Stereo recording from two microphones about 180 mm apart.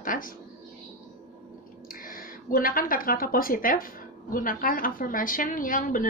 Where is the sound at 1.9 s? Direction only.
50° left (ahead or behind).